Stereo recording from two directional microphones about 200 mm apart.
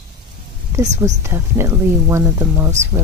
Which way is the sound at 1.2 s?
15° right (ahead or behind).